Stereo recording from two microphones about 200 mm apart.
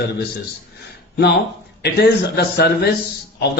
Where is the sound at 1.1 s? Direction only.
55° left (ahead or behind).